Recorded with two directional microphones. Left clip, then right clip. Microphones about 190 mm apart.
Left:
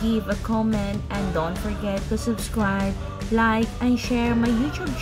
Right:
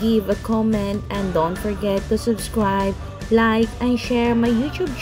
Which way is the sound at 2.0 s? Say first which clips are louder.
Right 6 dB; 10° right (ahead or behind).